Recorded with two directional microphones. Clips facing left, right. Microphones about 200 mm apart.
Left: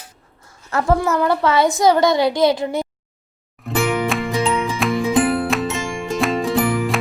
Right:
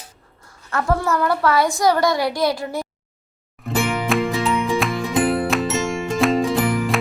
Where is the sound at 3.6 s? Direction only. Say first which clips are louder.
Left 3 dB; centre (ahead or behind).